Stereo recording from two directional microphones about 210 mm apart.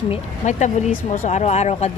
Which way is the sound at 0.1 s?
35° left (ahead or behind).